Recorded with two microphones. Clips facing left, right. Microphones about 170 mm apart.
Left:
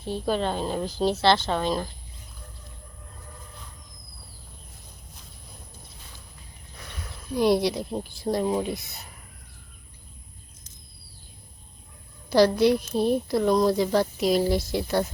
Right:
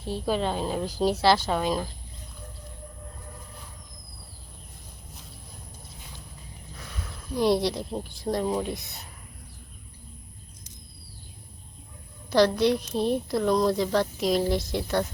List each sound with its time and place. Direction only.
0.1 s a woman's voice: 5° right (ahead or behind)
7.3 s a woman's voice: centre (ahead or behind)
12.3 s a woman's voice: 5° left (ahead or behind)